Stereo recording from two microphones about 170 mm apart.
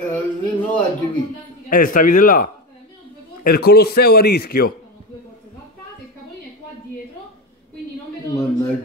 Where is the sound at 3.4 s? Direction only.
65° left (ahead or behind).